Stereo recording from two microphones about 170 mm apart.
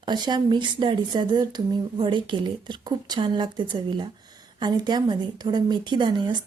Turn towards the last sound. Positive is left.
turn(degrees=-25)  # may be behind; listen again after turning